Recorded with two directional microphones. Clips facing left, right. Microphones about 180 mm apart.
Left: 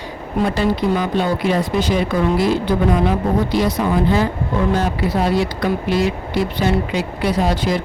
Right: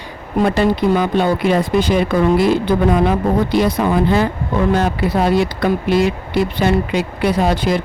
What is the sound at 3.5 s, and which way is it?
Speech, 60° right (ahead or behind).